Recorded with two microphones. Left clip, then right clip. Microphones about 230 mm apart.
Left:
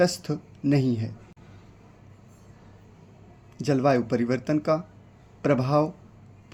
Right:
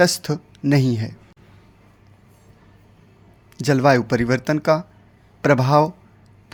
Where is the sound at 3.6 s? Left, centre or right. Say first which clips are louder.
Right 6 dB; right.